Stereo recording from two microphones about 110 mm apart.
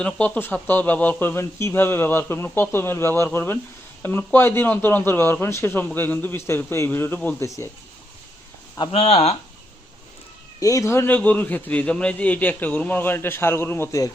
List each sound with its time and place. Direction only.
0.0 s a man's voice: 15° left (ahead or behind)
7.4 s speech: 25° left (ahead or behind)
8.9 s speech: 65° left (ahead or behind)
10.6 s a man's voice: 30° left (ahead or behind)